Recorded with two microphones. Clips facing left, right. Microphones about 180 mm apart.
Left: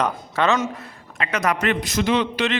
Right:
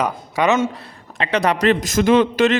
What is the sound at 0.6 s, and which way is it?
A man's voice, 30° right (ahead or behind).